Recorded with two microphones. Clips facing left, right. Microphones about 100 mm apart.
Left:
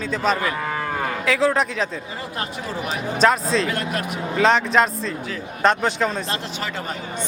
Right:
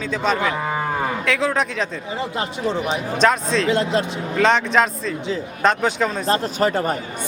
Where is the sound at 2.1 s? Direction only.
20° right (ahead or behind).